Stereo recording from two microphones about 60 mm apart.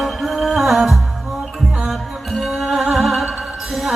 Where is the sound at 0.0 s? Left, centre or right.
Centre.